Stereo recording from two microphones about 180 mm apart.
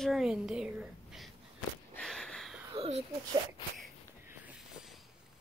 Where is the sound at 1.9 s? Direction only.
5° left (ahead or behind).